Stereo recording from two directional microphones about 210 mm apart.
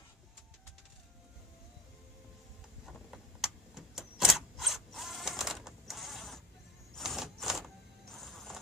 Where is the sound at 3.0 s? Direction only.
Centre (ahead or behind).